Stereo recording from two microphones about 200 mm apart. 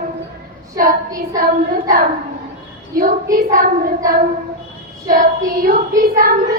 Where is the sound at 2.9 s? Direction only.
45° right (ahead or behind).